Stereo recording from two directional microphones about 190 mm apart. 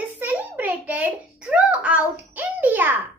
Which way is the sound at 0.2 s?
10° right (ahead or behind).